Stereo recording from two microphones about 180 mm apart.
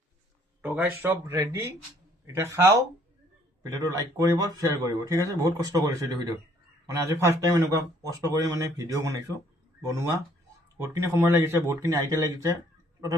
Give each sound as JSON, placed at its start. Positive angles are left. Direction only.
{"t": 0.6, "sound": "speech", "side_deg": -10}
{"t": 10.8, "sound": "speech", "side_deg": -15}